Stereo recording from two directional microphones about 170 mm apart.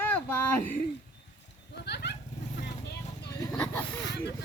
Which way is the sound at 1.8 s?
80° left.